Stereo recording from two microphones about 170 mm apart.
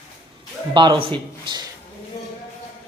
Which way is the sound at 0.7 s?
25° right (ahead or behind).